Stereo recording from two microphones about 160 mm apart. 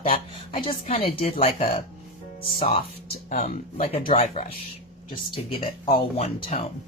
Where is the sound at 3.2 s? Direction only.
50° left (ahead or behind); by 6.2 s 35° left (ahead or behind).